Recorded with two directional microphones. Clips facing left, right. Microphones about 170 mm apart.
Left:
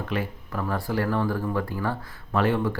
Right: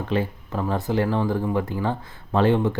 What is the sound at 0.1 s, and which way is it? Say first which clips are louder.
Speech: right 6 dB; 25° right (ahead or behind).